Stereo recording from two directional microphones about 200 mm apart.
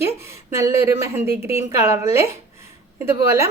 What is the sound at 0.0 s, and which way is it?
Speech, 15° right (ahead or behind).